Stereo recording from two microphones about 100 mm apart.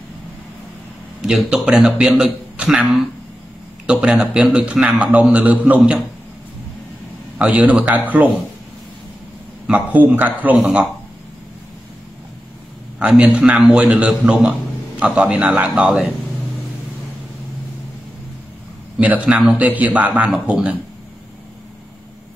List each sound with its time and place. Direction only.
1.2 s a man's voice: 5° right (ahead or behind)
7.3 s a man's voice: 15° right (ahead or behind)
9.7 s a man's voice: 15° right (ahead or behind)
13.4 s a man's voice: 5° right (ahead or behind)
18.9 s a man's voice: 15° right (ahead or behind)